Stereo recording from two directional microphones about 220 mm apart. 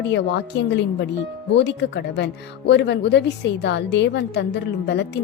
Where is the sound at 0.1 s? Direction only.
50° left (ahead or behind).